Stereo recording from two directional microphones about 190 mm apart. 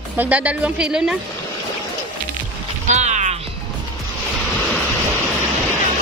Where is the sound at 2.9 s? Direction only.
40° right (ahead or behind).